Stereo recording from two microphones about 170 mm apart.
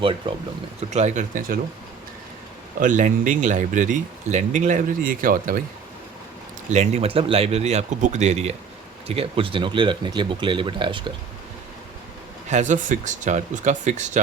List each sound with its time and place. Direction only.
0.0 s speech: 30° right (ahead or behind)
0.8 s speech: 40° right (ahead or behind)
2.8 s speech: 50° right (ahead or behind)
6.7 s speech: 40° right (ahead or behind)
12.5 s speech: 45° right (ahead or behind)